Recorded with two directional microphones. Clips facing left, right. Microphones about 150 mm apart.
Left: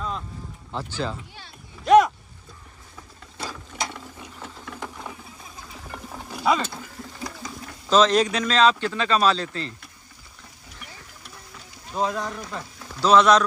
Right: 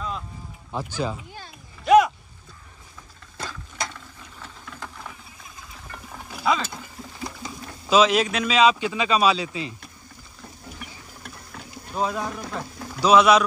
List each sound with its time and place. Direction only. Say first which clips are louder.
0.7 s a man's voice: right 2 dB; 15° right (ahead or behind)
1.9 s a sound: even; centre (ahead or behind)
3.8 s ratchet: left 1 dB; 20° left (ahead or behind)
5.9 s livestock: left 3 dB; centre (ahead or behind)
7.9 s a man's voice: even; 5° right (ahead or behind)
11.9 s a man's voice: even; 5° right (ahead or behind)